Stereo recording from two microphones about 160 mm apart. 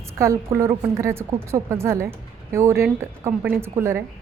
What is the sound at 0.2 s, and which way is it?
A woman's voice, 15° right (ahead or behind).